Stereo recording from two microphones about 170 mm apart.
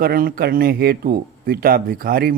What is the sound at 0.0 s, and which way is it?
Speech, 60° right (ahead or behind).